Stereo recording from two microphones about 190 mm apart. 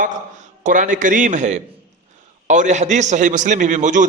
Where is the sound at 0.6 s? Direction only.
40° right (ahead or behind).